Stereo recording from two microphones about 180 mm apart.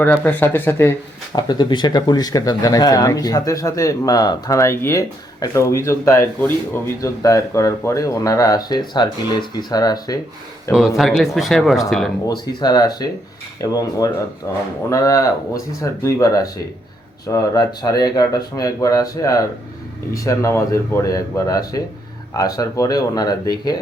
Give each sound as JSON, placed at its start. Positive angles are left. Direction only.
{"t": 0.0, "sound": "speech", "side_deg": 10}
{"t": 1.4, "sound": "speech", "side_deg": 25}
{"t": 10.7, "sound": "speech", "side_deg": -5}
{"t": 12.5, "sound": "speech", "side_deg": 20}